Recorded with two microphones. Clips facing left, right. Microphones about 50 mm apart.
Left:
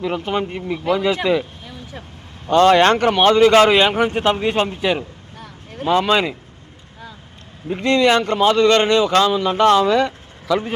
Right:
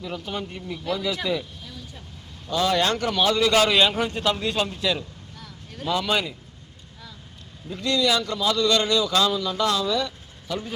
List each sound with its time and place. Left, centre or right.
0.0 s a man's voice: left
2.5 s a man's voice: left
7.7 s a man's voice: left
10.5 s a man's voice: left